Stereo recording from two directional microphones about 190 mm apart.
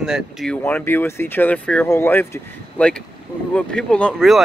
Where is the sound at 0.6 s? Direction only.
10° left (ahead or behind).